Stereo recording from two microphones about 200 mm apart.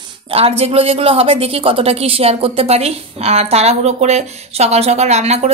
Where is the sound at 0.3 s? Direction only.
30° right (ahead or behind).